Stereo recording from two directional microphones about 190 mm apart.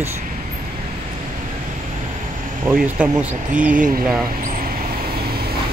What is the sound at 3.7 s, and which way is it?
Speech, 45° right (ahead or behind).